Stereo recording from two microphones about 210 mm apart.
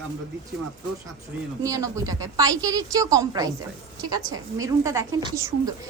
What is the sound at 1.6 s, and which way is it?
Speech, 15° right (ahead or behind).